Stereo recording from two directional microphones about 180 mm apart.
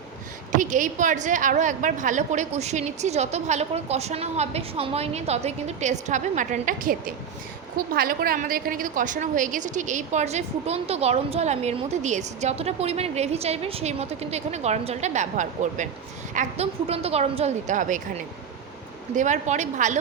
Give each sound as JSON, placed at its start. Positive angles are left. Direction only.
{"t": 0.5, "sound": "a woman's voice", "side_deg": -45}